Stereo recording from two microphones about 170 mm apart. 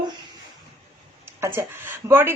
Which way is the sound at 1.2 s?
15° right (ahead or behind).